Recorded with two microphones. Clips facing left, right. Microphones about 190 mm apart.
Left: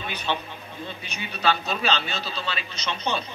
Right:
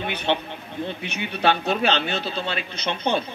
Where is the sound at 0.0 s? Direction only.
60° right (ahead or behind).